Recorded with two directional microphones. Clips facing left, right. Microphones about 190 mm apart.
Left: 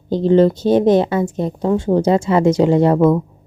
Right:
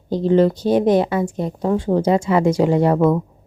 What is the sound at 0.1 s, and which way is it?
Speech, 25° left (ahead or behind).